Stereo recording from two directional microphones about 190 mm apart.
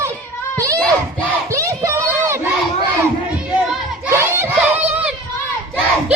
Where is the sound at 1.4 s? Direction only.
15° right (ahead or behind).